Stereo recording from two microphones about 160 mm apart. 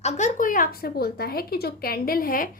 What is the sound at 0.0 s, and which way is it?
A woman's voice, 45° left (ahead or behind).